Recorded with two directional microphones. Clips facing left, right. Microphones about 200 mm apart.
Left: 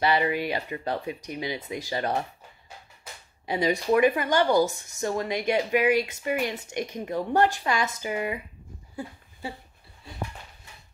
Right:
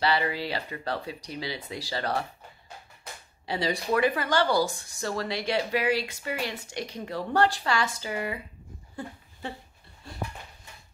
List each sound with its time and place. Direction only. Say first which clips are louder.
0.0 s speech: left 3 dB; 20° left (ahead or behind)
3.4 s speech: left 4 dB; 15° left (ahead or behind)